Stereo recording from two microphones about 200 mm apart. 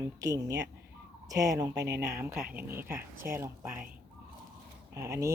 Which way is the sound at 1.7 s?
55° right (ahead or behind).